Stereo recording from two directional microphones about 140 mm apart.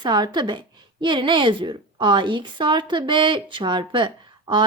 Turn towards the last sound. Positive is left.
turn(degrees=-35)  # may be behind; listen again after turning